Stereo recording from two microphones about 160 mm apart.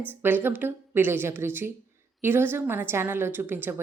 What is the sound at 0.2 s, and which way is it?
A woman's voice, 15° right (ahead or behind).